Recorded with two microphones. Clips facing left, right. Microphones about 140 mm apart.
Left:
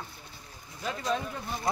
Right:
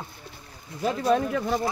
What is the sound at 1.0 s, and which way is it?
Speech, 75° right (ahead or behind).